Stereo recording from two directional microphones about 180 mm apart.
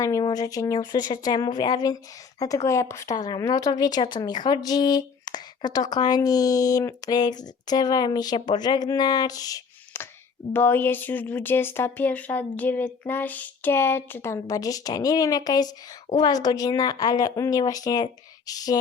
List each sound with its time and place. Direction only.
0.0 s speech: 20° left (ahead or behind)